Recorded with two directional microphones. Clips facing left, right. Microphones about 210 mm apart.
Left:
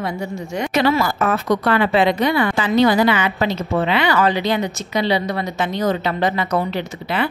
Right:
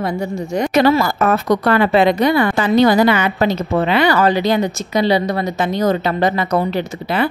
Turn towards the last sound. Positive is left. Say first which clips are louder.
# right 3 dB
turn(degrees=-40)  # may be behind; listen again after turning